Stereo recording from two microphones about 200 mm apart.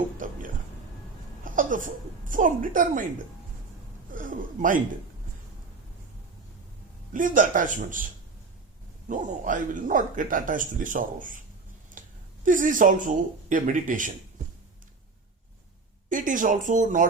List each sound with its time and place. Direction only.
0.2 s a sound: 40° right (ahead or behind)
1.5 s speech: 40° right (ahead or behind)
4.1 s a man's voice: 40° right (ahead or behind)
7.1 s a man's voice: 40° right (ahead or behind)
9.0 s a man's voice: 40° right (ahead or behind)
16.0 s a man's voice: 40° right (ahead or behind)